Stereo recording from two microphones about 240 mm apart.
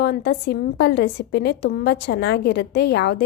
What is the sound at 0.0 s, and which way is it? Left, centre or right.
A woman's voice, left.